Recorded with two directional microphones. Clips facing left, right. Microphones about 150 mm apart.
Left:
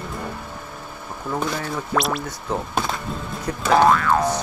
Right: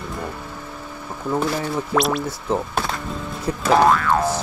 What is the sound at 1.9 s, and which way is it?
Boing, centre (ahead or behind).